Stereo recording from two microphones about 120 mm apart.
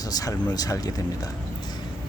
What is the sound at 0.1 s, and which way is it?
Speech, 30° left (ahead or behind).